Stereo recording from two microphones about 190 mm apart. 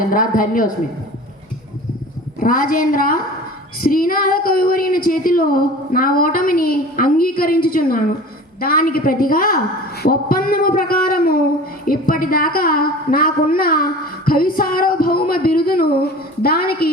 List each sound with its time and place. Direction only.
0.1 s a woman's voice: 45° left (ahead or behind)
2.4 s a woman's voice: 45° left (ahead or behind)